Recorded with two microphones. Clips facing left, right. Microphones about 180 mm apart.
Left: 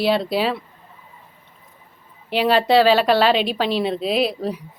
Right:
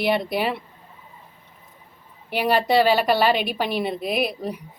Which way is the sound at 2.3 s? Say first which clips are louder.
Left 3 dB; 15° right (ahead or behind).